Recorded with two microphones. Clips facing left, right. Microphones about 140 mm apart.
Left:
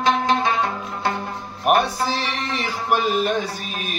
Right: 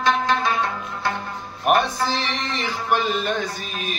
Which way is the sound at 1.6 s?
5° left (ahead or behind).